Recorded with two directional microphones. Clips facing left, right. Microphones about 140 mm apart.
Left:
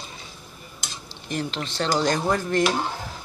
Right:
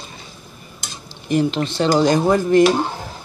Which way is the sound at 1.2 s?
10° right (ahead or behind).